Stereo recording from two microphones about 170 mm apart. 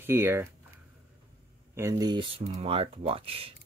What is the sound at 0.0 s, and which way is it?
Speech, 15° right (ahead or behind).